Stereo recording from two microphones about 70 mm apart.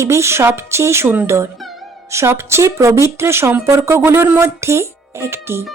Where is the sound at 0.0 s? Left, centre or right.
Right.